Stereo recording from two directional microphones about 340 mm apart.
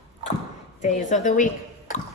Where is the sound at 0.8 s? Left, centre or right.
Left.